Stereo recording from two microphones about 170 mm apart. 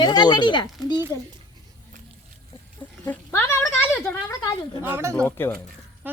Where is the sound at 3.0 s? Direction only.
15° left (ahead or behind).